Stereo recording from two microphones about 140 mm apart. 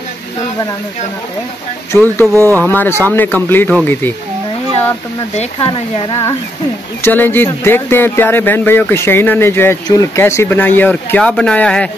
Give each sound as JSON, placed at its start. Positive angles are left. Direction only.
{"t": 1.9, "sound": "speech", "side_deg": 15}
{"t": 2.3, "sound": "speech", "side_deg": -20}
{"t": 2.6, "sound": "speech", "side_deg": 15}
{"t": 5.3, "sound": "speech", "side_deg": 50}
{"t": 7.0, "sound": "speech", "side_deg": 15}